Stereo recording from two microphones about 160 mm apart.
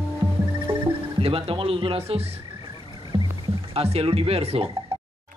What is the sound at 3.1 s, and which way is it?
Rowboat, 30° right (ahead or behind).